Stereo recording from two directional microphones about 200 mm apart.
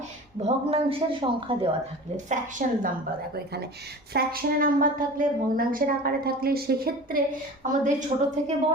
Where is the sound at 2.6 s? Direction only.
40° right (ahead or behind).